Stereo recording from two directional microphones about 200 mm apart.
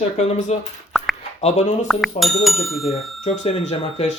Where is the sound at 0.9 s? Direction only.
Centre (ahead or behind).